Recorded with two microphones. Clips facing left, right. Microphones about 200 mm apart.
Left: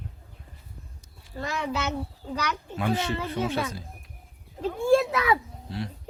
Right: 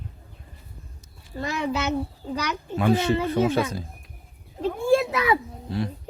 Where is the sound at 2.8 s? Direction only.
45° right (ahead or behind).